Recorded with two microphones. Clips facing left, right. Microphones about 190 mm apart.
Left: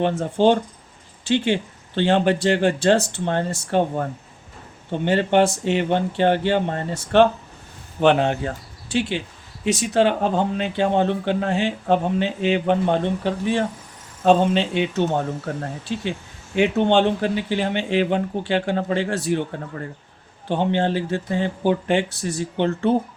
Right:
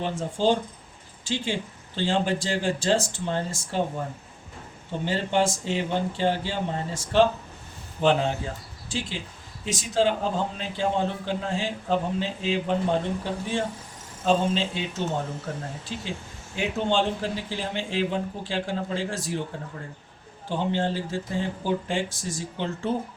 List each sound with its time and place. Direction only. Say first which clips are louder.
0.0 s speech: left 7 dB; 60° left (ahead or behind)
20.5 s speech: left 6 dB; 65° left (ahead or behind)